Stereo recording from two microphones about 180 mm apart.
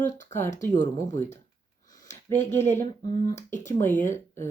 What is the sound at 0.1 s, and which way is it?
Speech, 45° left (ahead or behind).